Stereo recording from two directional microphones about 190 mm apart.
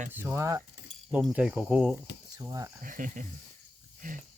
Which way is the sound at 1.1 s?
5° right (ahead or behind).